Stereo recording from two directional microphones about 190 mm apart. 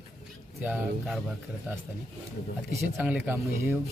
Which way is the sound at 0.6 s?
10° right (ahead or behind).